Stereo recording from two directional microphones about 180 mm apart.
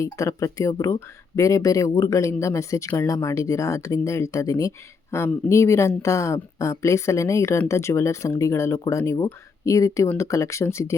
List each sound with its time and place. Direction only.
0.0 s speech: 15° left (ahead or behind)